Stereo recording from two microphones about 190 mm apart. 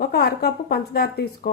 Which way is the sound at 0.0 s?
55° left (ahead or behind).